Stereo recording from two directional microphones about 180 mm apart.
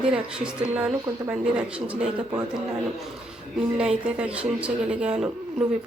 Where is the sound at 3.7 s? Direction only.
5° right (ahead or behind).